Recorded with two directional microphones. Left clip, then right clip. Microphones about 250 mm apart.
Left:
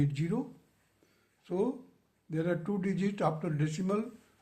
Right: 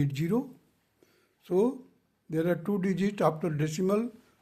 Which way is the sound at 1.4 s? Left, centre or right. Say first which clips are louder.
Right 6 dB; right.